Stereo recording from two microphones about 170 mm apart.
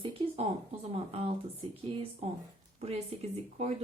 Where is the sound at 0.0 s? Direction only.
30° right (ahead or behind).